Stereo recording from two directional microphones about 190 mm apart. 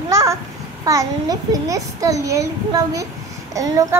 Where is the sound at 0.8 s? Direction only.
20° right (ahead or behind).